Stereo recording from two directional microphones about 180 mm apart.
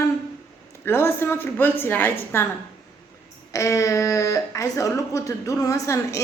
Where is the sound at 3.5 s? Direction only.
15° left (ahead or behind).